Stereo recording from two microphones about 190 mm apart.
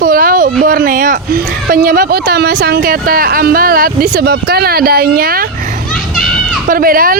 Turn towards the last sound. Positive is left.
turn(degrees=-50)  # may be behind; listen again after turning